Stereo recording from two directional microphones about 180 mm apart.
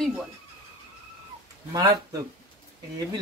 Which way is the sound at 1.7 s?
20° right (ahead or behind).